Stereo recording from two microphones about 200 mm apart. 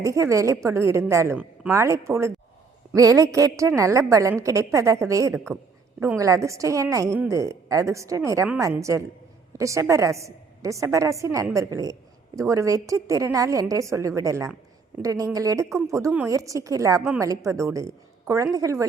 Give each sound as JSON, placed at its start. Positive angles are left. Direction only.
{"t": 0.0, "sound": "a woman's voice", "side_deg": -15}